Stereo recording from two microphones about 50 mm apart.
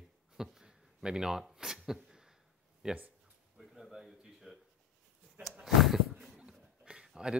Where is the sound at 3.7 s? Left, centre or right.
Centre.